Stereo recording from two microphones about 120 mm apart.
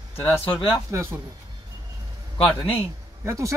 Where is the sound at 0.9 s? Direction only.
20° right (ahead or behind).